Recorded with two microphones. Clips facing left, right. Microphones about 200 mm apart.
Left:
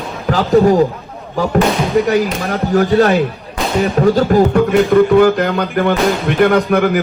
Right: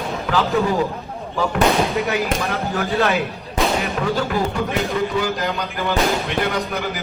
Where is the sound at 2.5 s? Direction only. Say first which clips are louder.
Left 9 dB; 40° left (ahead or behind).